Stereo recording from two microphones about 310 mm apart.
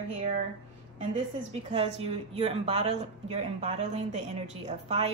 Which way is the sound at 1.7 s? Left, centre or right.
Centre.